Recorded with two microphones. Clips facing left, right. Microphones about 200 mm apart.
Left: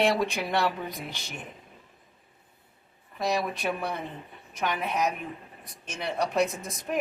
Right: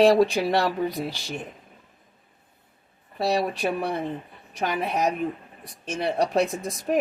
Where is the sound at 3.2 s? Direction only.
35° right (ahead or behind).